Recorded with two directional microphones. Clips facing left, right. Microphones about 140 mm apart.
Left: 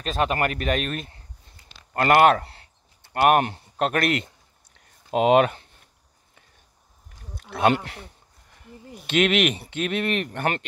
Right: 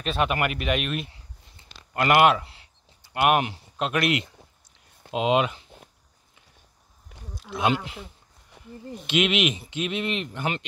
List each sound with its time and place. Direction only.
0.0 s speech: 35° left (ahead or behind)
7.3 s speech: 60° left (ahead or behind)
9.0 s speech: 45° left (ahead or behind)